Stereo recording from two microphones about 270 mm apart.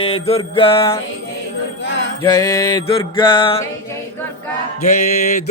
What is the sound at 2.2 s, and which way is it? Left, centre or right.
Music, centre.